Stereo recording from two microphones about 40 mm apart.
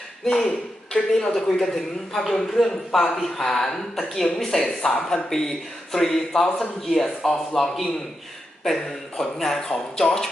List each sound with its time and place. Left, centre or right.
0.3 s a man's voice: centre